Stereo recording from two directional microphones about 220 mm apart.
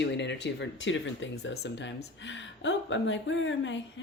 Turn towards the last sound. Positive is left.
turn(degrees=55)  # may be behind; listen again after turning